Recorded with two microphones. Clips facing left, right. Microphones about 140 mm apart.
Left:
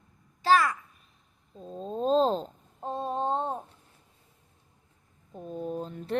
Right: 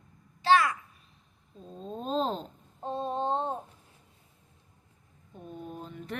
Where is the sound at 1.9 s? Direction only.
35° left (ahead or behind).